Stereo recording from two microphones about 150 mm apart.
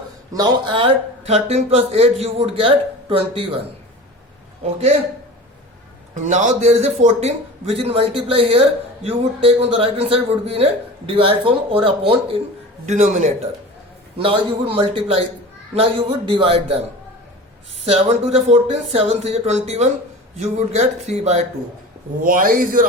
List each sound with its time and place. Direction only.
0.3 s a man's voice: 30° right (ahead or behind)
4.6 s a man's voice: 45° right (ahead or behind)
6.1 s a man's voice: 55° right (ahead or behind); by 12.4 s 35° right (ahead or behind)
12.8 s a man's voice: 50° right (ahead or behind)
14.2 s a man's voice: 35° right (ahead or behind)
17.8 s a man's voice: 45° right (ahead or behind)
22.2 s a man's voice: 65° right (ahead or behind)